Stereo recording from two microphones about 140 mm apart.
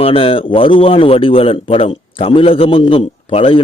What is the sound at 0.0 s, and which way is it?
A man's voice, 40° left (ahead or behind).